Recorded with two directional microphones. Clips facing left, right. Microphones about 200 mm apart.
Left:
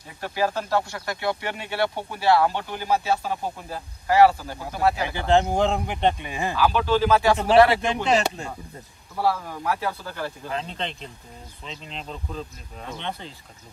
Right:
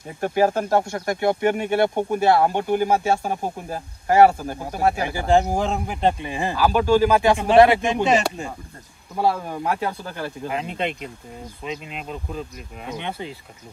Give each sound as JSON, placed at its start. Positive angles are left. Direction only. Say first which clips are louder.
{"t": 0.2, "sound": "speech", "louder": "right 6 dB", "side_deg": -50}
{"t": 5.3, "sound": "speech", "louder": "right 1 dB", "side_deg": -5}
{"t": 6.5, "sound": "speech", "louder": "right 4 dB", "side_deg": -45}
{"t": 7.0, "sound": "speech", "louder": "right 2 dB", "side_deg": -15}
{"t": 7.9, "sound": "speech", "louder": "right 3 dB", "side_deg": -5}
{"t": 9.1, "sound": "speech", "louder": "right 3 dB", "side_deg": -20}